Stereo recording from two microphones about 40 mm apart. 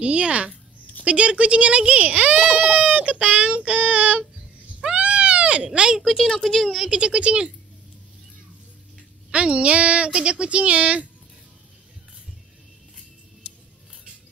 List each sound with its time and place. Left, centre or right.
0.0 s child singing: right
4.8 s a sound: right
5.7 s a woman's voice: centre
6.0 s speech: centre
6.9 s a woman's voice: right
9.3 s a woman's voice: right